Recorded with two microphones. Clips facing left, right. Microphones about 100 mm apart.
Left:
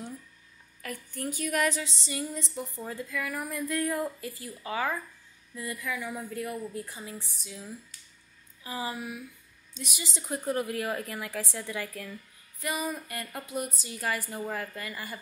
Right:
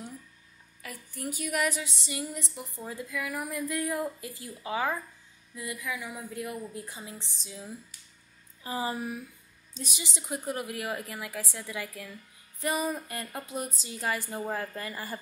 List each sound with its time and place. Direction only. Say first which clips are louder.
0.8 s a woman's voice: left 2 dB; 10° right (ahead or behind); by 10.0 s 30° right (ahead or behind)
10.3 s a woman's voice: left 4 dB; 10° right (ahead or behind)
12.5 s music: right 3 dB; 35° right (ahead or behind)
12.8 s a woman's voice: right 2 dB; 25° right (ahead or behind)